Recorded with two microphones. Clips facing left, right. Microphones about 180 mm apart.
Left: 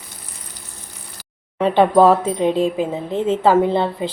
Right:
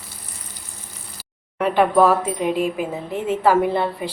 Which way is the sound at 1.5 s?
25° left (ahead or behind).